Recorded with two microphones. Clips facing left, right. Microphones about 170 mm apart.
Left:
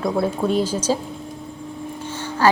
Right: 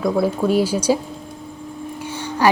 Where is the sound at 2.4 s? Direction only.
15° right (ahead or behind).